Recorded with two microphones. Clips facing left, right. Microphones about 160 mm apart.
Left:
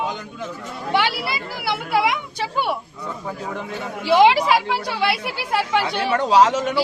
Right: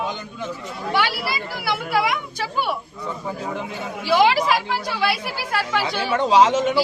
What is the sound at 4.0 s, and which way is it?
A woman's voice, 20° left (ahead or behind).